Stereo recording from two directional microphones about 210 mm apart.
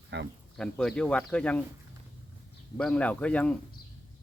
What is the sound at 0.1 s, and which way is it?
Speech, 55° right (ahead or behind).